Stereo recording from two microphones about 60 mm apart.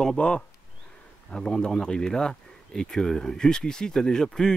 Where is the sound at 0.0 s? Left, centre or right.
Centre.